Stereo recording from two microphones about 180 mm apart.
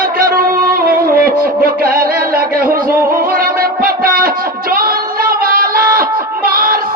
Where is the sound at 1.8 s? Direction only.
55° right (ahead or behind).